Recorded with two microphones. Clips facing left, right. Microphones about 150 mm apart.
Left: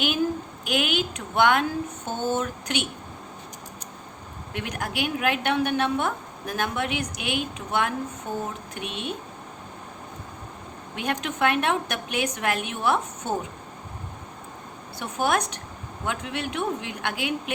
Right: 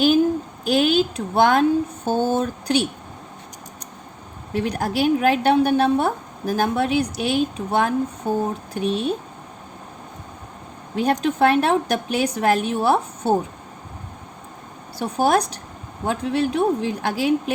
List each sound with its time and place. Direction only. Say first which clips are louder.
0.6 s a woman's voice: right 8 dB; 35° right (ahead or behind)
4.5 s a woman's voice: right 8 dB; 35° right (ahead or behind)
10.9 s a woman's voice: right 9 dB; 35° right (ahead or behind)
14.9 s a woman's voice: right 6 dB; 35° right (ahead or behind)